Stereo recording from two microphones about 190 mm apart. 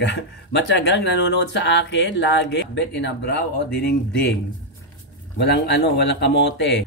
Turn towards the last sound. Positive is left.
turn(degrees=70)  # may be behind; listen again after turning